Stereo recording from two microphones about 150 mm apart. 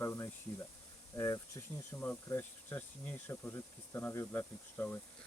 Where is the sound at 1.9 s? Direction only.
10° left (ahead or behind).